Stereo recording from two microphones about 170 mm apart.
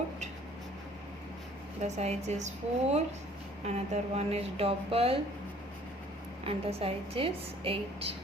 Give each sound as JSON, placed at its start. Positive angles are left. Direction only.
{"t": 1.8, "sound": "a woman's voice", "side_deg": -40}
{"t": 6.4, "sound": "a woman's voice", "side_deg": -35}